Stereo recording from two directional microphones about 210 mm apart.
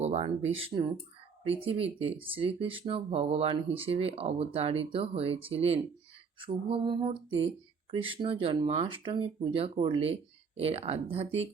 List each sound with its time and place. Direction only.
0.0 s speech: 30° right (ahead or behind)
0.7 s speech: 20° right (ahead or behind)